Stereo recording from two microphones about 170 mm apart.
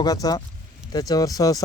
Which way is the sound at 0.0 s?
20° left (ahead or behind).